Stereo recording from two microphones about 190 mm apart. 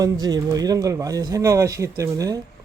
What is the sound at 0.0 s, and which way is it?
Speech, 20° right (ahead or behind).